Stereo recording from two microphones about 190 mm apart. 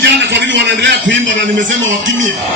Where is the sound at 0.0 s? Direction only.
65° right (ahead or behind).